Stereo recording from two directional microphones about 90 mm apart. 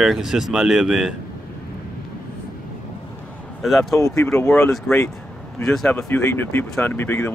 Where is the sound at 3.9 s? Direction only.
35° left (ahead or behind).